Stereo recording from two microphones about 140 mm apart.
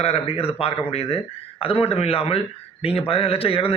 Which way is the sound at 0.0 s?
45° left (ahead or behind).